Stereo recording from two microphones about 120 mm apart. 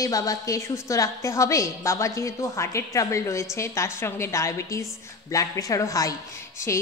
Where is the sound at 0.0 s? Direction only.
30° left (ahead or behind).